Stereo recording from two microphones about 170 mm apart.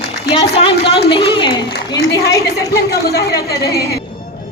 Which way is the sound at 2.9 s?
70° left (ahead or behind).